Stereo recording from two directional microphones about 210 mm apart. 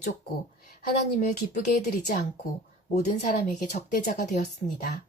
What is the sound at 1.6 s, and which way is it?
Speech, 50° left (ahead or behind).